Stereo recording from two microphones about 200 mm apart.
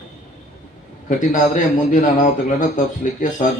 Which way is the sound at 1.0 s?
40° left (ahead or behind).